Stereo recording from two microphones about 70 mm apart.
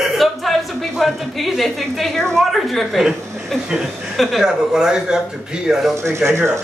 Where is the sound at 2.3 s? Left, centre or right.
Centre.